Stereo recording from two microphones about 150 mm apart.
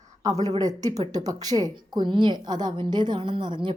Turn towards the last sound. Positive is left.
turn(degrees=-30)  # may be behind; listen again after turning